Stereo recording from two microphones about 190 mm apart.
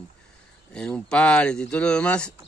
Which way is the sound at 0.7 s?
5° left (ahead or behind).